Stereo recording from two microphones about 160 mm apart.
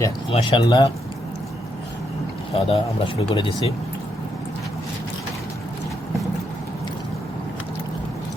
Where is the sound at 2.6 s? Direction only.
35° left (ahead or behind).